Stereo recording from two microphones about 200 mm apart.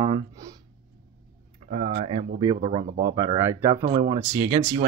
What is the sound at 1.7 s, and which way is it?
Speech, 35° right (ahead or behind).